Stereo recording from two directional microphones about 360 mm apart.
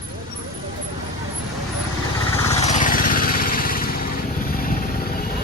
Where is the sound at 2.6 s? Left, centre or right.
Centre.